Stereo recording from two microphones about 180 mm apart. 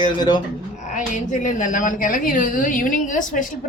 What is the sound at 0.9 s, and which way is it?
A woman's voice, 40° left (ahead or behind).